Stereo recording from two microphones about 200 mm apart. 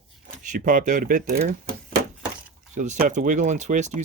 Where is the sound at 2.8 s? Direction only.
40° right (ahead or behind).